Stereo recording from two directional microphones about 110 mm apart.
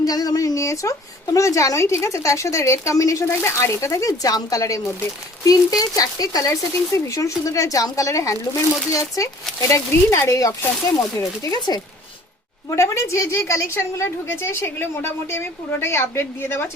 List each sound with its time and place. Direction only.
0.0 s speech: 35° left (ahead or behind)
12.7 s speech: 25° left (ahead or behind)